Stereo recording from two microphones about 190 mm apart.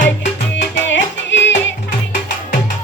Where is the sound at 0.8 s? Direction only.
75° left (ahead or behind).